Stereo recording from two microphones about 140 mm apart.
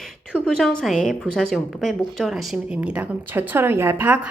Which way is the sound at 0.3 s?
5° left (ahead or behind).